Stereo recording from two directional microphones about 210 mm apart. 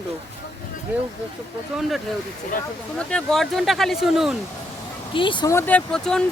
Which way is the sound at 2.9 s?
5° left (ahead or behind).